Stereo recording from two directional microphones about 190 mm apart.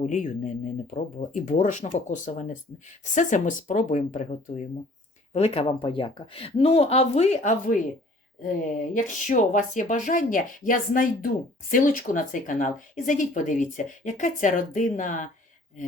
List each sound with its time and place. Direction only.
0.0 s speech: 40° left (ahead or behind)